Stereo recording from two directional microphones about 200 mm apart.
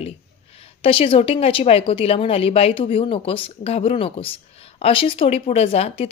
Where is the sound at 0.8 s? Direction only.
25° left (ahead or behind).